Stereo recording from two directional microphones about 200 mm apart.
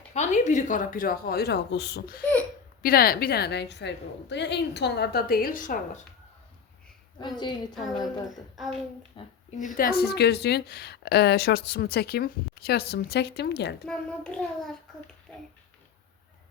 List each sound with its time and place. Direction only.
0.1 s speech: 35° left (ahead or behind)
7.2 s a woman's voice: 20° left (ahead or behind)
8.5 s child singing: centre (ahead or behind)
9.2 s a woman's voice: 25° left (ahead or behind)
9.6 s speech: 40° left (ahead or behind)
13.8 s child singing: 5° left (ahead or behind)